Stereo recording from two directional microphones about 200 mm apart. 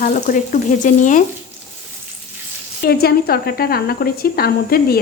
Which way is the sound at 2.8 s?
50° left (ahead or behind).